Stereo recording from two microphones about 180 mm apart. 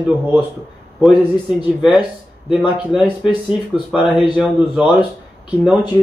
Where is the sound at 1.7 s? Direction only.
5° right (ahead or behind).